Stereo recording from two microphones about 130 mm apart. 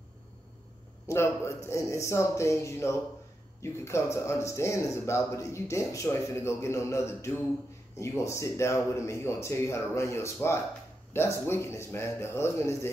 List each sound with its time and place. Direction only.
1.0 s speech: 20° left (ahead or behind)